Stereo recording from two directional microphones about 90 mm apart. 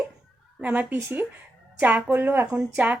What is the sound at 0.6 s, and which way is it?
A woman's voice, 20° right (ahead or behind).